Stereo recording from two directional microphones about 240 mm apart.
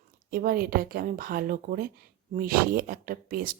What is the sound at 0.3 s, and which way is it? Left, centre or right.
Speech, right.